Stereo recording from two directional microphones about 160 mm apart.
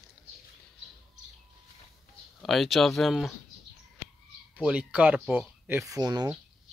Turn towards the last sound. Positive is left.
turn(degrees=-25)  # may be behind; listen again after turning